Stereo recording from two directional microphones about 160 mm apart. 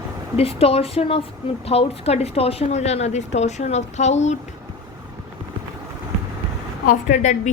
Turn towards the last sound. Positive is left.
turn(degrees=50)  # may be behind; listen again after turning